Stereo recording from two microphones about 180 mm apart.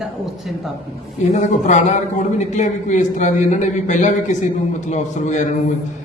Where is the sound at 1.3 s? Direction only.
40° left (ahead or behind).